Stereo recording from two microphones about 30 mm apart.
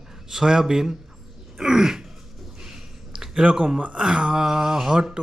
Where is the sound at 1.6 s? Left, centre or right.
Centre.